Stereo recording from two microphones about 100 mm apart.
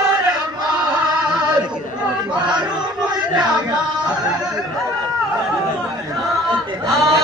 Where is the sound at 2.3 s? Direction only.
10° right (ahead or behind).